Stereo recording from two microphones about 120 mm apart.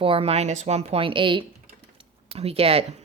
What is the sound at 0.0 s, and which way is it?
Speech, 50° right (ahead or behind).